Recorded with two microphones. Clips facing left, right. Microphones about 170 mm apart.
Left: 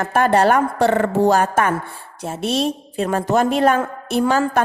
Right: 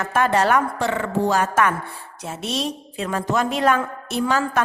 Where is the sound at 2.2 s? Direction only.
55° left (ahead or behind).